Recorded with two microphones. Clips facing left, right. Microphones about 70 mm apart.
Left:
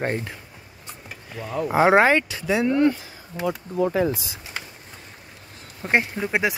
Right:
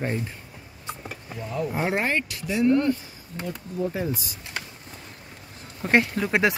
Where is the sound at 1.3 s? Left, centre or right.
Left.